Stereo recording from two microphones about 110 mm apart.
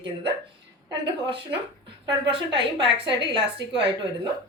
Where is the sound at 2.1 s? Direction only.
55° right (ahead or behind).